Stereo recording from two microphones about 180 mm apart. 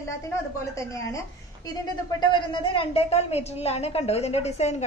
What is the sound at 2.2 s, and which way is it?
A woman's voice, 25° left (ahead or behind).